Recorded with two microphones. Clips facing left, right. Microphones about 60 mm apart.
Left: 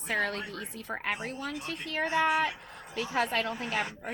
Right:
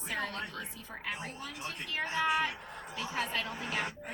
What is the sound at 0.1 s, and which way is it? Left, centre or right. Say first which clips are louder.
A woman's voice: left 6 dB; left.